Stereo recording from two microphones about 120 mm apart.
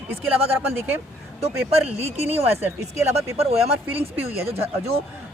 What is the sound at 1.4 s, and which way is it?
Speech, 60° right (ahead or behind).